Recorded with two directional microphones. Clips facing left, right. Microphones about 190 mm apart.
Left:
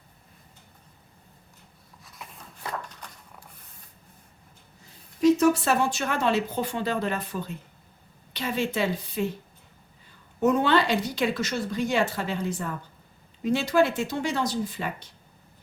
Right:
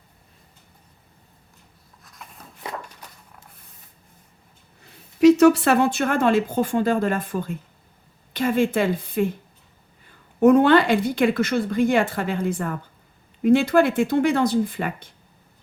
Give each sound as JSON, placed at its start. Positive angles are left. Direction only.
{"t": 2.6, "sound": "a sound", "side_deg": -10}
{"t": 4.9, "sound": "a woman's voice", "side_deg": -75}
{"t": 10.4, "sound": "a woman's voice", "side_deg": -55}